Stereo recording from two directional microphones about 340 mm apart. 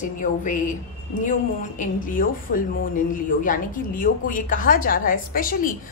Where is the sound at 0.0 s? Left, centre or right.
Left.